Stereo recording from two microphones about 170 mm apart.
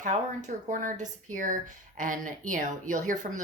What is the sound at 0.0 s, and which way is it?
Speech, 45° right (ahead or behind).